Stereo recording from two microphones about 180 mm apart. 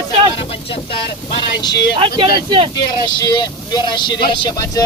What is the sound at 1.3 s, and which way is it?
Speech, 25° left (ahead or behind).